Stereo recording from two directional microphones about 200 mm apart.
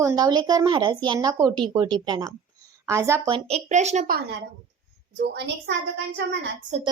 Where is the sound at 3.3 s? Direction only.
30° right (ahead or behind).